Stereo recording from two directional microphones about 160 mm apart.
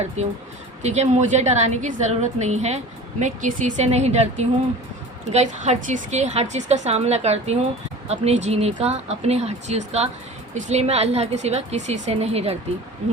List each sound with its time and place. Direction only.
0.2 s a woman's voice: 45° right (ahead or behind)